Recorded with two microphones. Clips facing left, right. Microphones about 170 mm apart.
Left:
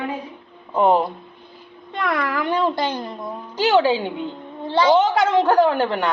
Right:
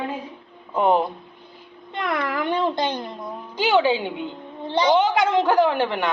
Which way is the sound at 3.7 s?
40° left (ahead or behind).